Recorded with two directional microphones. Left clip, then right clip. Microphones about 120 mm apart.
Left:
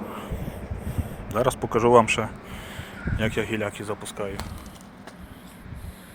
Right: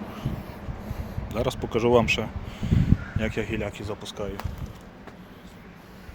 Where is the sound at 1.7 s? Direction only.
25° right (ahead or behind).